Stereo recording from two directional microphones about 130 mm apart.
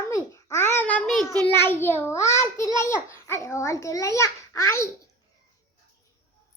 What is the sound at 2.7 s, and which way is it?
Babbling, 20° left (ahead or behind).